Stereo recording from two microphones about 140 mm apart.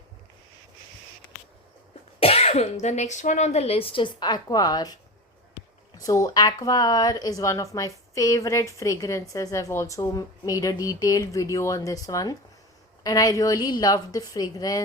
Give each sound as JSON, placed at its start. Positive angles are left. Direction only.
{"t": 2.2, "sound": "speech", "side_deg": 45}
{"t": 6.0, "sound": "speech", "side_deg": 25}